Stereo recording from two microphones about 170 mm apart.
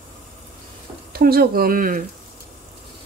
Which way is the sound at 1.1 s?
65° right (ahead or behind).